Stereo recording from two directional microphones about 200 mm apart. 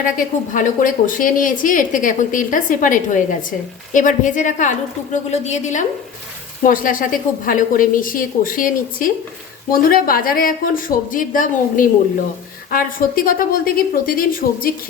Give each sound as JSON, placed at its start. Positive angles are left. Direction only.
{"t": 0.0, "sound": "a woman's voice", "side_deg": 40}